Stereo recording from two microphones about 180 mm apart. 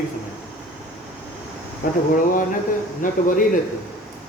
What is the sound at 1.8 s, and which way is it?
Speech, 55° left (ahead or behind).